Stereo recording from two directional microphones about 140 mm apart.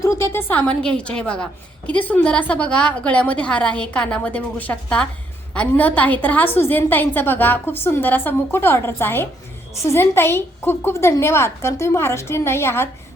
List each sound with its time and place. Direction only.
0.0 s a woman's voice: 20° left (ahead or behind)